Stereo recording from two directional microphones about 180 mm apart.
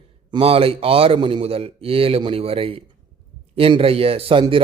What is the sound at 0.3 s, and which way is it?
A man's voice, 30° right (ahead or behind).